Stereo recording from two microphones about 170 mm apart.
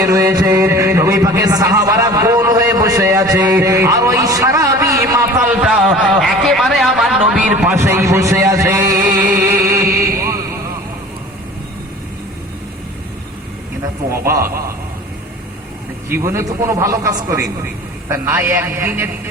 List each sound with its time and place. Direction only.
0.0 s a sound: 20° right (ahead or behind)
14.1 s a man's voice: 15° right (ahead or behind)
16.1 s a man's voice: 15° right (ahead or behind)